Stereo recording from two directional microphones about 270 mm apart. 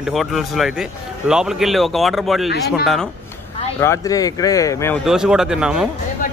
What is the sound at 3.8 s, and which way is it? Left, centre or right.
Speech, centre.